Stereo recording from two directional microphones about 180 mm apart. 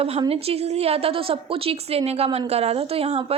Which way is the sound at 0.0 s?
35° right (ahead or behind).